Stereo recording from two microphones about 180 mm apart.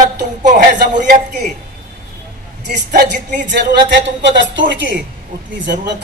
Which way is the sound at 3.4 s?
70° right (ahead or behind).